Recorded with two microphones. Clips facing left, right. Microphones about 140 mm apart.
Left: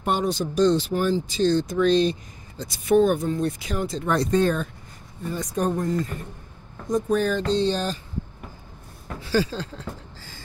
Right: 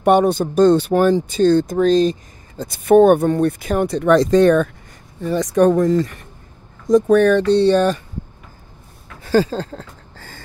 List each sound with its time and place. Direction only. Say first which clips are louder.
0.0 s speech: right 10 dB; 65° right (ahead or behind)
5.2 s speech: right 11 dB; 90° right; by 8.0 s 65° right (ahead or behind)
9.2 s speech: right 7 dB; 45° right (ahead or behind)
10.1 s beatboxing: right 4 dB; 60° right (ahead or behind)